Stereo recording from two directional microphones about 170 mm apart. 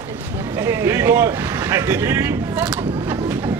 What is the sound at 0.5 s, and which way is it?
Speech, 15° right (ahead or behind).